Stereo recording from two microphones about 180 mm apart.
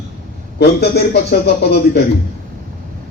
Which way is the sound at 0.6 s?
65° left (ahead or behind).